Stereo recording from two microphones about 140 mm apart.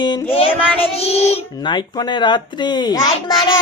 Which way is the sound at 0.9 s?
45° left (ahead or behind).